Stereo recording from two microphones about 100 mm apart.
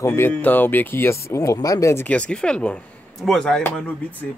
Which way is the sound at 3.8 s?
15° left (ahead or behind).